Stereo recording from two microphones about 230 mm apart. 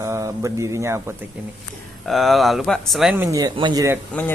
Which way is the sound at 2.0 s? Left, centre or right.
Centre.